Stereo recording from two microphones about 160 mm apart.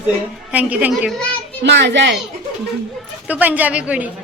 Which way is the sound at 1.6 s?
90° right.